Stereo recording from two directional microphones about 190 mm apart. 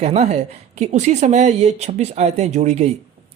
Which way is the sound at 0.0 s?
35° right (ahead or behind).